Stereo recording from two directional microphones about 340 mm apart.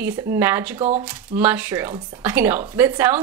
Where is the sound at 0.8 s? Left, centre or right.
Centre.